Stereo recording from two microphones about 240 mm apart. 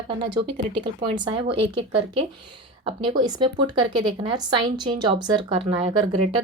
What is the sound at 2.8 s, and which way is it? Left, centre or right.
A woman's voice, centre.